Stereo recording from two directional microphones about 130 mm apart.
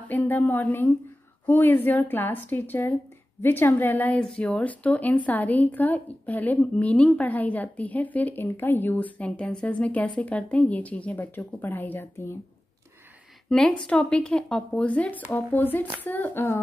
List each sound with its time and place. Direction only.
0.1 s a woman's voice: 15° left (ahead or behind)
13.5 s a woman's voice: 5° left (ahead or behind)